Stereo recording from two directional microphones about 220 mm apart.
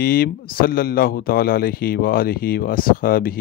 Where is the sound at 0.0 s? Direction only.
45° left (ahead or behind).